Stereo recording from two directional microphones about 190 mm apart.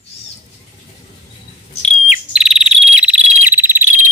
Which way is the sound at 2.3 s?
5° right (ahead or behind).